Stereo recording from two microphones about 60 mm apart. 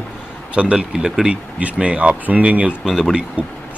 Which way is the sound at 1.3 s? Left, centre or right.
Right.